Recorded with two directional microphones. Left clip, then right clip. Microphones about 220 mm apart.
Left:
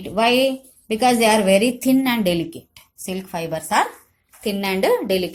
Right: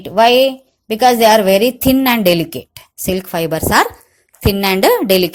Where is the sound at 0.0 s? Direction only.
40° right (ahead or behind).